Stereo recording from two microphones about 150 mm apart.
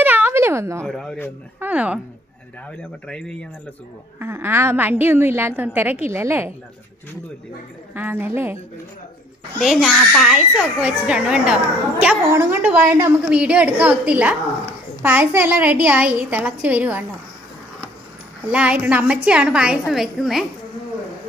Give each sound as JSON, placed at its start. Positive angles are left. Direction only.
{"t": 0.0, "sound": "a sound", "side_deg": -15}
{"t": 0.8, "sound": "a child's voice", "side_deg": 5}
{"t": 1.6, "sound": "a woman's voice", "side_deg": -10}
{"t": 2.7, "sound": "speech", "side_deg": 5}
{"t": 4.2, "sound": "a woman's voice", "side_deg": -15}
{"t": 7.9, "sound": "a woman's voice", "side_deg": -10}
{"t": 9.6, "sound": "a child's voice", "side_deg": 0}
{"t": 12.3, "sound": "a woman's voice", "side_deg": -15}
{"t": 18.4, "sound": "a woman's voice", "side_deg": -10}